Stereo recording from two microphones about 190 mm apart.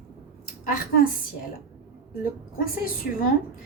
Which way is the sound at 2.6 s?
50° left (ahead or behind).